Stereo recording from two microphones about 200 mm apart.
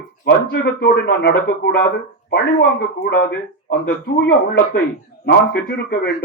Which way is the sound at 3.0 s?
50° left (ahead or behind).